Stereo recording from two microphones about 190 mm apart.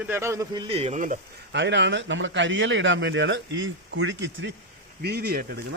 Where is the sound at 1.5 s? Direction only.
70° right (ahead or behind).